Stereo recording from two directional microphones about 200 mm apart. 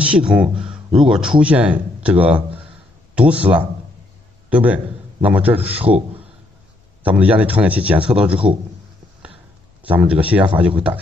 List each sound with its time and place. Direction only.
0.0 s a man's voice: 5° right (ahead or behind)
3.2 s a man's voice: 5° right (ahead or behind)
7.0 s a man's voice: 5° right (ahead or behind)
8.3 s a man's voice: 25° right (ahead or behind)
9.8 s a man's voice: 5° right (ahead or behind)